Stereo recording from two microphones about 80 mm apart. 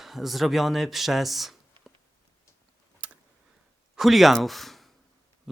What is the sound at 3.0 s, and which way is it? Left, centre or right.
Tick, centre.